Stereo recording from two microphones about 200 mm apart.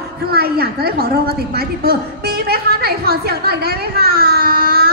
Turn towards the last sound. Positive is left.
turn(degrees=-50)  # may be behind; listen again after turning